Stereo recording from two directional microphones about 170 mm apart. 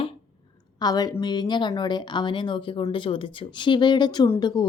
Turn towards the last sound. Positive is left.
turn(degrees=25)  # may be behind; listen again after turning